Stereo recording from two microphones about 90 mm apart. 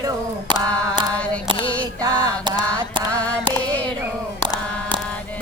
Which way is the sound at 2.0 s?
45° right (ahead or behind).